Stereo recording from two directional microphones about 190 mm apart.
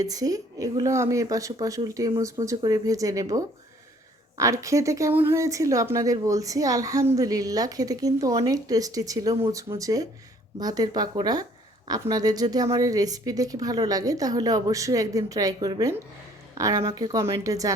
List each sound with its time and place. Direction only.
0.0 s a woman's voice: 20° right (ahead or behind)